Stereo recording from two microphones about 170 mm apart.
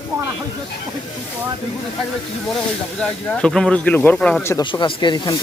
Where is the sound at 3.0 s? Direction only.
5° left (ahead or behind).